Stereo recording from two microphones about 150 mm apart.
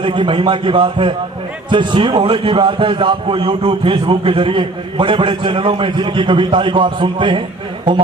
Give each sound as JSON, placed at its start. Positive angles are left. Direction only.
{"t": 0.0, "sound": "a man's voice", "side_deg": -35}